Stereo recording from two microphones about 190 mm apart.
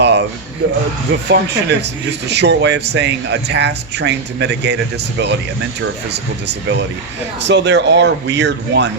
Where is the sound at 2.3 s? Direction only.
65° right (ahead or behind).